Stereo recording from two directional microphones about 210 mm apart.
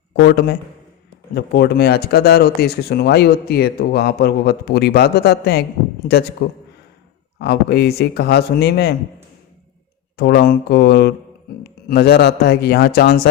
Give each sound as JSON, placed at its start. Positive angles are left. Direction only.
{"t": 0.2, "sound": "speech", "side_deg": 50}
{"t": 10.2, "sound": "speech", "side_deg": 50}